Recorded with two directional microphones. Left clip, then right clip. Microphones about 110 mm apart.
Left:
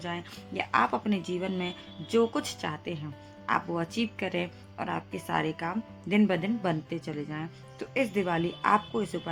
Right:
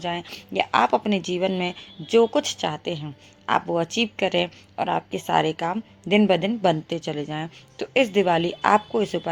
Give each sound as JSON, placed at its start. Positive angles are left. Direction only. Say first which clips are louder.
{"t": 0.0, "sound": "speech", "louder": "right 8 dB", "side_deg": -35}